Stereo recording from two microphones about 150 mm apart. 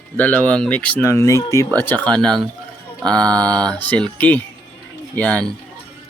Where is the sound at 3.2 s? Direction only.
25° right (ahead or behind).